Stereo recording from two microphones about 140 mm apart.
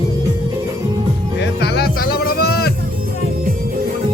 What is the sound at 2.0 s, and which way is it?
Music, 90° left.